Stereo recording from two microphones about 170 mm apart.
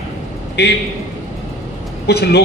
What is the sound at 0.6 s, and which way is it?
Speech, 75° left (ahead or behind).